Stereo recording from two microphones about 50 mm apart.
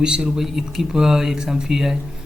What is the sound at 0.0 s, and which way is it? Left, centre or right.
A man's voice, centre.